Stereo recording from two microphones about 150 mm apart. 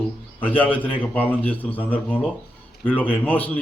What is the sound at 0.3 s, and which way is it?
A man's voice, 10° left (ahead or behind).